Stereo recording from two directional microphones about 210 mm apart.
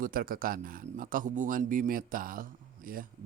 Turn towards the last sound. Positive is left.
turn(degrees=-40)  # may be behind; listen again after turning